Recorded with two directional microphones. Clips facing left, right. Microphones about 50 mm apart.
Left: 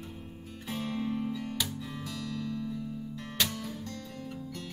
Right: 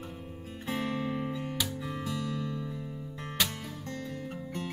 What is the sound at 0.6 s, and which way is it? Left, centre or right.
Music, right.